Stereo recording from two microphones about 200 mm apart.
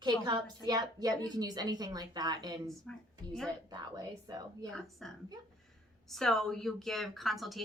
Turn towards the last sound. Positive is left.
turn(degrees=0)  # may be behind; listen again after turning